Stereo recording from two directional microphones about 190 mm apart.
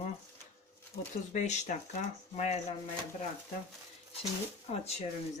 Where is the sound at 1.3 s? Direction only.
40° left (ahead or behind).